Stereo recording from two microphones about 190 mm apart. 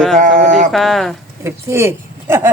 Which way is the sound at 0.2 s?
40° right (ahead or behind).